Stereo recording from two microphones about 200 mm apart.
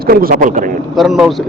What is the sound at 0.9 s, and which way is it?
Speech, centre (ahead or behind).